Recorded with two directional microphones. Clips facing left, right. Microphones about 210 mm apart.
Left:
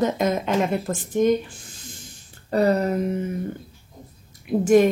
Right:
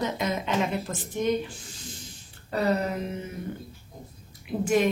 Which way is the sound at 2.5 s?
45° left (ahead or behind).